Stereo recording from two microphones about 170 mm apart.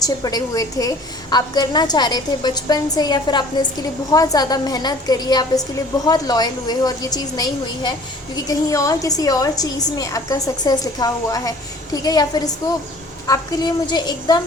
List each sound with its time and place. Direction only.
0.0 s a woman's voice: 20° left (ahead or behind)